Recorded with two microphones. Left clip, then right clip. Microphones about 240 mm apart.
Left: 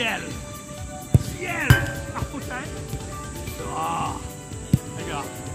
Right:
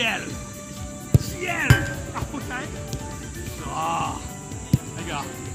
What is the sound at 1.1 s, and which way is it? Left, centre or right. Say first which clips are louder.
Music: right 1 dB; right.